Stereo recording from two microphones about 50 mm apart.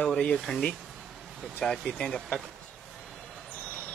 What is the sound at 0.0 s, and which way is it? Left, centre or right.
Speech, left.